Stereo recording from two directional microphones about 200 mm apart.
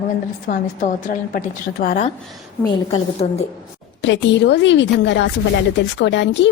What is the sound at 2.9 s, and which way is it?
Speech, 30° left (ahead or behind).